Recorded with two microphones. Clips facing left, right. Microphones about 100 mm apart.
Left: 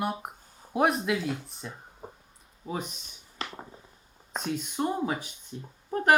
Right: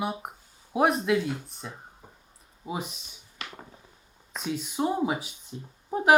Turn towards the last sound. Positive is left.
turn(degrees=-10)  # may be behind; listen again after turning